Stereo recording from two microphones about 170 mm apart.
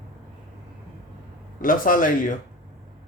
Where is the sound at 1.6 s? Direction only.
55° left (ahead or behind).